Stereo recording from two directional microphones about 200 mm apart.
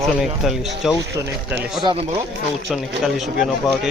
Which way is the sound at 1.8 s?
25° right (ahead or behind).